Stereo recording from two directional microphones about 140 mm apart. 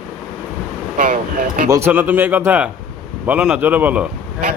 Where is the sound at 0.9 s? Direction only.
70° right (ahead or behind).